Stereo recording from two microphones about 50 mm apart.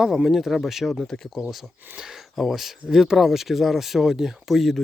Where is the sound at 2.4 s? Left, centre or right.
Centre.